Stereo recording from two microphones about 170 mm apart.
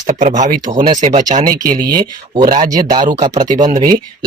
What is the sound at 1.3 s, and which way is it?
Speech, 55° right (ahead or behind).